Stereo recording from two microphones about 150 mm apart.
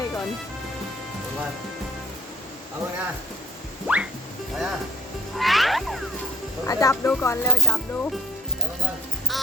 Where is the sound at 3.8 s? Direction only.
5° right (ahead or behind).